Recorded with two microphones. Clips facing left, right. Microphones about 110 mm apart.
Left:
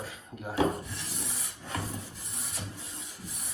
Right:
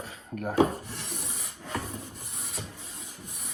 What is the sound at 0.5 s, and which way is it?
Speech, 30° right (ahead or behind).